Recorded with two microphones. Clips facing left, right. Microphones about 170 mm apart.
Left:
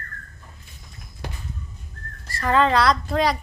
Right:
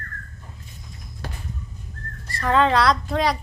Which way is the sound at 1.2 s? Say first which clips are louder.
Even; 15° left (ahead or behind).